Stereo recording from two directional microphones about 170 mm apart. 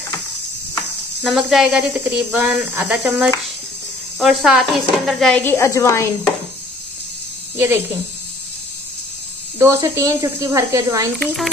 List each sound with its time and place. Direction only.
1.2 s speech: centre (ahead or behind)
4.2 s a woman's voice: centre (ahead or behind); by 6.0 s 15° left (ahead or behind)
7.5 s a woman's voice: 15° right (ahead or behind)
9.6 s a woman's voice: 20° right (ahead or behind)
11.2 s speech: centre (ahead or behind)